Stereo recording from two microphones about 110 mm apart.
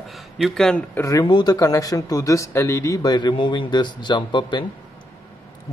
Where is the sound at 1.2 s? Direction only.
40° left (ahead or behind).